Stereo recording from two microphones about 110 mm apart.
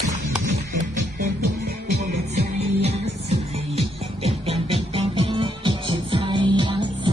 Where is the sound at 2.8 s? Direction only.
75° right (ahead or behind).